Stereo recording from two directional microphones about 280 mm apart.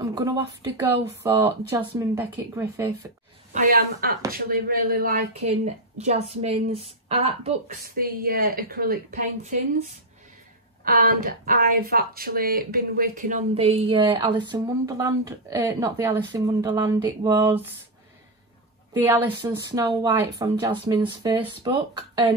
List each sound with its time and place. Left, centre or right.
0.0 s speech: centre
3.5 s a woman's voice: right; by 17.6 s centre
18.9 s speech: centre